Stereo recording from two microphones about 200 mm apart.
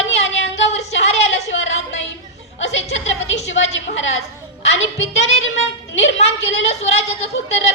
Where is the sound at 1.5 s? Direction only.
70° left (ahead or behind).